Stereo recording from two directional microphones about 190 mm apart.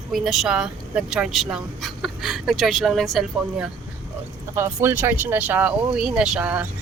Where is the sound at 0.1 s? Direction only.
Centre (ahead or behind).